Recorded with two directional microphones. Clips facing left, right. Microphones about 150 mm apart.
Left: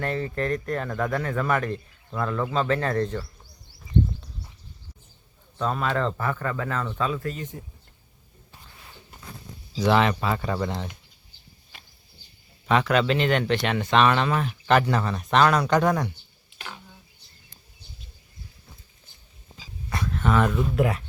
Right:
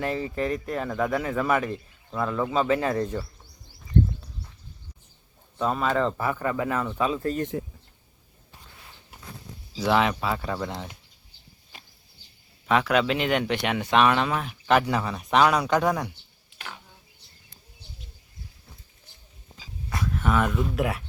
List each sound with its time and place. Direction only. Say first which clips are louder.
0.0 s speech: even; 5° right (ahead or behind)
5.5 s speech: right 1 dB; 5° right (ahead or behind)
7.1 s speech: right 2 dB; 30° right (ahead or behind)
7.6 s speech: right 10 dB; 90° right
9.7 s speech: left 2 dB; 5° right (ahead or behind)
12.6 s speech: left 1 dB; 5° right (ahead or behind)
16.6 s a sound: left 1 dB; centre (ahead or behind)
19.9 s speech: left 1 dB; 5° right (ahead or behind)